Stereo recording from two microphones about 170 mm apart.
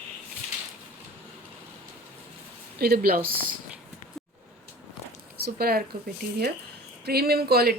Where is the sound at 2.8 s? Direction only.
65° right (ahead or behind).